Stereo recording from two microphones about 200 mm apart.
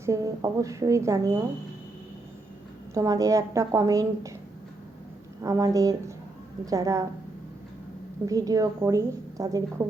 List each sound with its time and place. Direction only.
0.0 s a woman's voice: 15° right (ahead or behind)
2.9 s a woman's voice: 15° right (ahead or behind)
5.4 s a woman's voice: 15° right (ahead or behind)
8.3 s a woman's voice: 15° right (ahead or behind)